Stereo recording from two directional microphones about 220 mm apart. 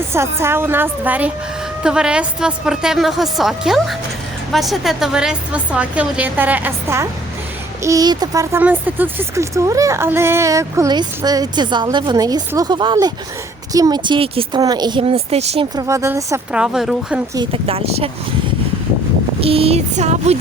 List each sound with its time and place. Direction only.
0.1 s a woman's voice: 10° right (ahead or behind); by 15.6 s 30° right (ahead or behind)
15.7 s speech: 15° right (ahead or behind)
17.3 s a woman's voice: 25° right (ahead or behind)
19.4 s a woman's voice: 25° right (ahead or behind)